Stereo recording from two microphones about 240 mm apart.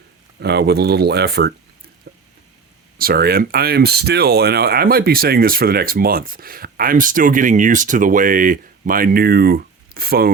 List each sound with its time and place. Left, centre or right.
0.3 s speech: right
3.0 s speech: right